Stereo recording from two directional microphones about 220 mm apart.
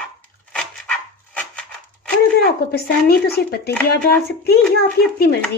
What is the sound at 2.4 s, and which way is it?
A woman's voice, 45° left (ahead or behind).